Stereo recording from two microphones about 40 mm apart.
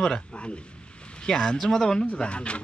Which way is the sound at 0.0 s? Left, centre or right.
Left.